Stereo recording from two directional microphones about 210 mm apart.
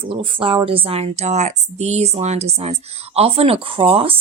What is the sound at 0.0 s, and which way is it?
Speech, 25° right (ahead or behind).